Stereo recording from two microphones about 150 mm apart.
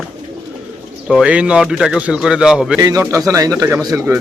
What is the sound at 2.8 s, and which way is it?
Speech, 20° right (ahead or behind).